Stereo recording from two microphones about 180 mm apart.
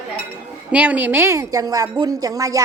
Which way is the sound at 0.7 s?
10° right (ahead or behind).